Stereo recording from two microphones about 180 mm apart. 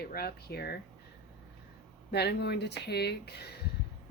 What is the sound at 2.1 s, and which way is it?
Speech, 65° left (ahead or behind).